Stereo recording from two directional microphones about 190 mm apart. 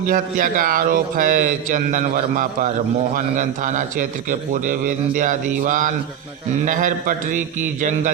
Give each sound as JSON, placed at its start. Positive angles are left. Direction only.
{"t": 0.1, "sound": "a man's voice", "side_deg": -45}